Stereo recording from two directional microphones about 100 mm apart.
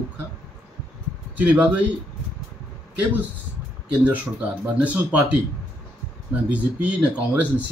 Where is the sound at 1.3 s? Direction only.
15° right (ahead or behind).